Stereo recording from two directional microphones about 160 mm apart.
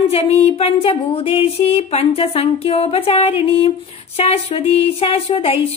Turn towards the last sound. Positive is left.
turn(degrees=35)  # may be behind; listen again after turning